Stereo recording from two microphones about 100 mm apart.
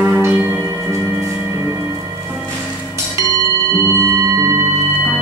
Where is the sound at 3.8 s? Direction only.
30° right (ahead or behind).